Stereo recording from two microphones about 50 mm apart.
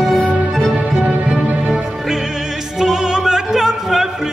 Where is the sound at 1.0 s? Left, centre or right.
Right.